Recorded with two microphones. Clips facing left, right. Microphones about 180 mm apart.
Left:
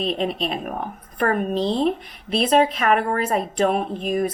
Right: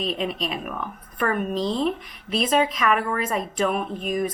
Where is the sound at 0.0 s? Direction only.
35° left (ahead or behind).